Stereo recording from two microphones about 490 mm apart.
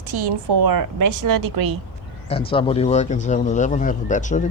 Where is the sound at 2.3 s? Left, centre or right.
Centre.